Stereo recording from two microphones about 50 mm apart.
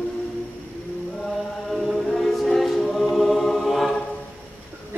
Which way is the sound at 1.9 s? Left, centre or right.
Centre.